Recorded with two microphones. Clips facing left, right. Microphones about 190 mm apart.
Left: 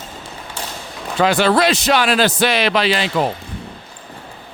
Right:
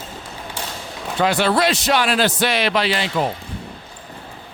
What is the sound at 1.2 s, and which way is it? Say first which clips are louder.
A man's voice: left 3 dB; 90° left.